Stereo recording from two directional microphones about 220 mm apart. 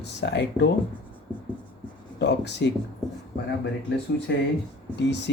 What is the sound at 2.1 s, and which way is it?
Speech, 50° left (ahead or behind).